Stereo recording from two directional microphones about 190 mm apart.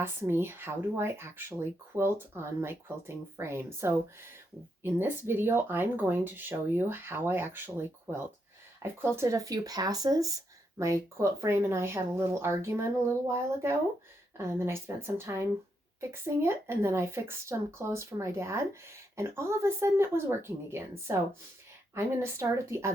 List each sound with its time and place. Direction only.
0.0 s speech: 10° right (ahead or behind)